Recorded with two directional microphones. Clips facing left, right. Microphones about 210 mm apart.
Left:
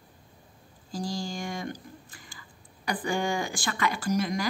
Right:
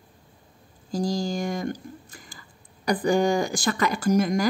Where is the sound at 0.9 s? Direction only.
40° right (ahead or behind).